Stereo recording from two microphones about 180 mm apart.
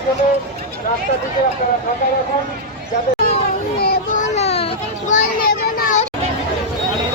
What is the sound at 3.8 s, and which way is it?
Children playing, 45° left (ahead or behind).